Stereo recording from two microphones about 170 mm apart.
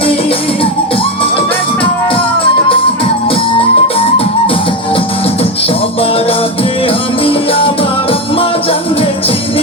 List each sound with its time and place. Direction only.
3.6 s music: 35° left (ahead or behind)
6.8 s music: 30° left (ahead or behind)